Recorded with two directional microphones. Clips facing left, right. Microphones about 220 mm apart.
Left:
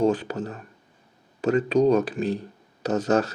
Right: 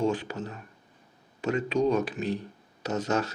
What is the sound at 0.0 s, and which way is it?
Speech, 35° left (ahead or behind).